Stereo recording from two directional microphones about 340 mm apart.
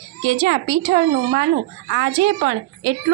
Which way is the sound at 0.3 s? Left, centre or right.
Centre.